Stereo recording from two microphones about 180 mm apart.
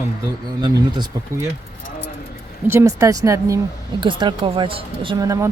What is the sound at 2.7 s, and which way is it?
A woman's voice, 15° right (ahead or behind).